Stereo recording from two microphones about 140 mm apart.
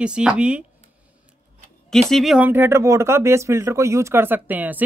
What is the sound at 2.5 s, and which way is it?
Speech, 15° right (ahead or behind).